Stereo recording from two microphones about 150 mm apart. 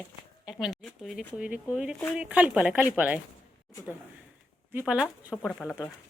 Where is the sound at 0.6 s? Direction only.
Centre (ahead or behind).